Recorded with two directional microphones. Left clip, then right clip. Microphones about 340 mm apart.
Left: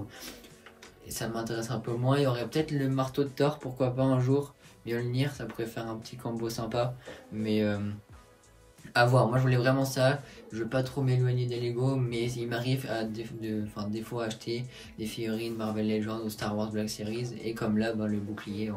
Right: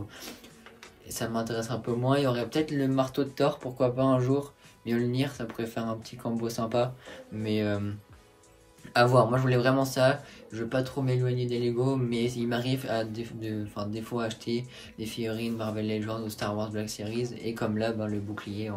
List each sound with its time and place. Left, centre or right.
1.0 s speech: centre
8.9 s speech: centre